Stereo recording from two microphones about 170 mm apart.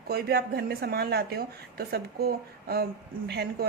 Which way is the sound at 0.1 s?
70° right (ahead or behind).